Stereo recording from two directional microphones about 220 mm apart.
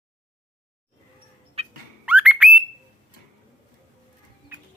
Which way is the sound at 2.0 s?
5° right (ahead or behind).